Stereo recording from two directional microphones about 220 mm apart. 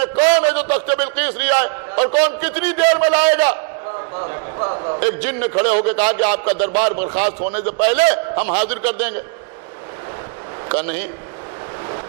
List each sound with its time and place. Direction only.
0.2 s a sound: 10° right (ahead or behind)
4.6 s a man's voice: 30° right (ahead or behind)
4.9 s a man's voice: 10° right (ahead or behind)
10.7 s a man's voice: 10° right (ahead or behind)